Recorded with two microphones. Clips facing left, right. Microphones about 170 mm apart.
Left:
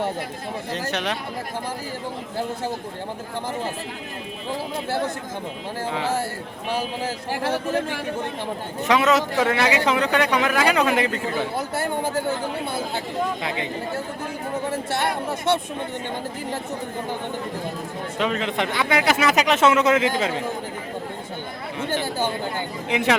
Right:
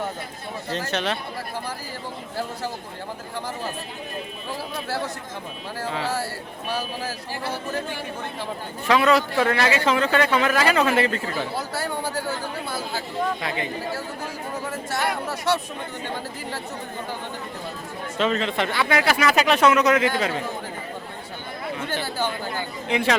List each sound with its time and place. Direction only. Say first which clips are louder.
0.7 s speech: right 1 dB; 15° left (ahead or behind)
5.8 s speech: left 2 dB; 20° left (ahead or behind)
7.3 s speech: left 6 dB; 90° left
8.9 s speech: even; 20° left (ahead or behind)
14.7 s speech: left 1 dB; 30° left (ahead or behind)
18.2 s speech: right 1 dB; 15° left (ahead or behind)
21.8 s chatter: left 4 dB; 15° left (ahead or behind)